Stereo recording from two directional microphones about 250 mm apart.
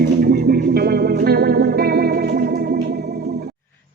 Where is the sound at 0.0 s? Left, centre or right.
Right.